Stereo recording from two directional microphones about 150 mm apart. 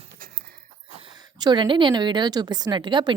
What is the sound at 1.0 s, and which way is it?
A woman's voice, 30° right (ahead or behind).